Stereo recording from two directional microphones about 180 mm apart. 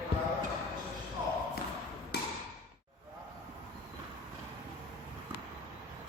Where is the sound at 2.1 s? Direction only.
60° left (ahead or behind).